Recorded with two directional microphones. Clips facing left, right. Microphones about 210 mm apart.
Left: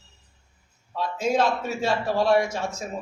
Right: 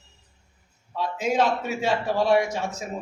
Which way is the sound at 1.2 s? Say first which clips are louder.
Even; 15° right (ahead or behind).